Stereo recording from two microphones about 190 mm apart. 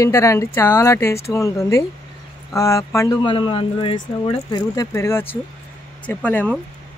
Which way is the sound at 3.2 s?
25° left (ahead or behind).